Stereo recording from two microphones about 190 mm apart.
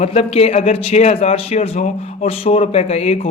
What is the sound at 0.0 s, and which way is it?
A man's voice, 35° left (ahead or behind).